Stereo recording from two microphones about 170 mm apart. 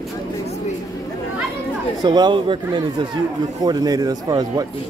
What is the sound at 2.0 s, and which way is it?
Speech, 25° right (ahead or behind).